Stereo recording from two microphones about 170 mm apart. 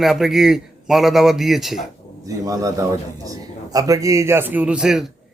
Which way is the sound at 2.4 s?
20° right (ahead or behind).